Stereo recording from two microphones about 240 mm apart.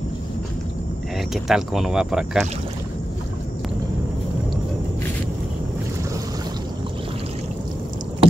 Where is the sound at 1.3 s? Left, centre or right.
Centre.